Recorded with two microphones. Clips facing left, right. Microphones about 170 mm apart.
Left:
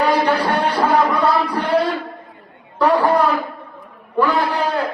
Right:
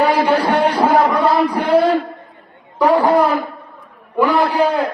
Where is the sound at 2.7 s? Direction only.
15° right (ahead or behind).